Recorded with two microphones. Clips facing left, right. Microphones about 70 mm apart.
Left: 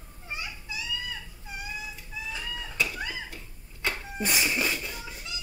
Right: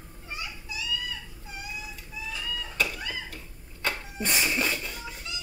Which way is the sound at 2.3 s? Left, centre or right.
Left.